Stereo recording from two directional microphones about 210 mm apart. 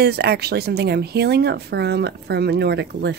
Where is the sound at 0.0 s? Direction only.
50° right (ahead or behind).